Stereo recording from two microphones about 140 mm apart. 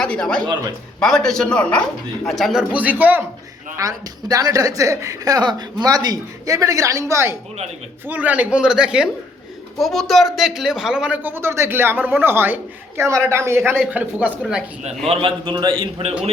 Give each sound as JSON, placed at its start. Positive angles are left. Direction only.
{"t": 0.0, "sound": "a man's voice", "side_deg": 5}
{"t": 3.8, "sound": "a woman's voice", "side_deg": -25}
{"t": 14.8, "sound": "a man's voice", "side_deg": -45}